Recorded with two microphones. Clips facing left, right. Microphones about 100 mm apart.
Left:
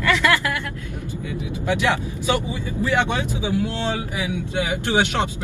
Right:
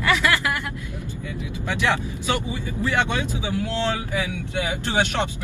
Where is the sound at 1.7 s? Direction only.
20° left (ahead or behind).